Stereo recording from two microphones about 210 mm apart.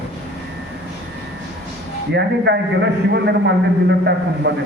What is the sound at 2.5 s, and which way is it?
Speech, 55° right (ahead or behind).